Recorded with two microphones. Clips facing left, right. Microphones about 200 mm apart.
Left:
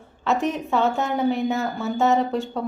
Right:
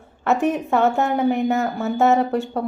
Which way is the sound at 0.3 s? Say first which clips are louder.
Right 3 dB; 15° right (ahead or behind).